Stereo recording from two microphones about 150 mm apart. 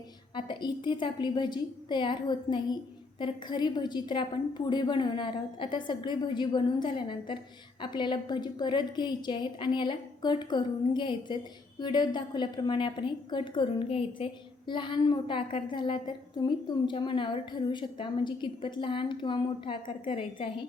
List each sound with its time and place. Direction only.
0.3 s a woman's voice: 30° left (ahead or behind)